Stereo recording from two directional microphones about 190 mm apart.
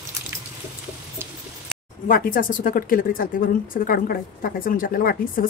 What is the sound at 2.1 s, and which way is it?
A woman's voice, 45° left (ahead or behind).